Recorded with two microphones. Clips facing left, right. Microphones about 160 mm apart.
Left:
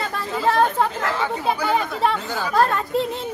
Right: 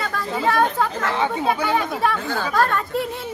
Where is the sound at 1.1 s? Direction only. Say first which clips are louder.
Right 5 dB; 25° right (ahead or behind).